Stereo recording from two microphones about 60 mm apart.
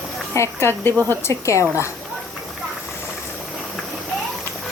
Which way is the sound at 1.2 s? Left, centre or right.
Left.